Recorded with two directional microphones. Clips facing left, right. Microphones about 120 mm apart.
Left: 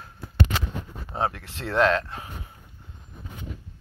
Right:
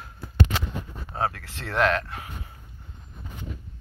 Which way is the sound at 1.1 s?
20° left (ahead or behind).